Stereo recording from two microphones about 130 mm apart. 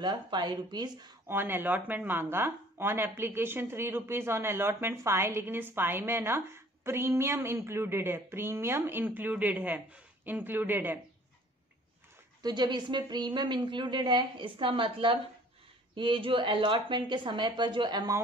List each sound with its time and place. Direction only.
0.0 s a woman's voice: 35° right (ahead or behind)
1.2 s speech: 15° right (ahead or behind)
12.4 s a woman's voice: 35° right (ahead or behind)